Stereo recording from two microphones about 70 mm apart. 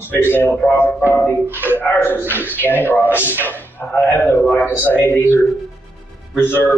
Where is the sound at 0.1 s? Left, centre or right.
Left.